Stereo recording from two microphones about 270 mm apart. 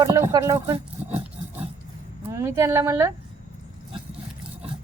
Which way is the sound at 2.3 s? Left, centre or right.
Centre.